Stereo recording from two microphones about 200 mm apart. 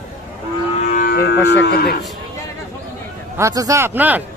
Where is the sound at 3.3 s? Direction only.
15° right (ahead or behind).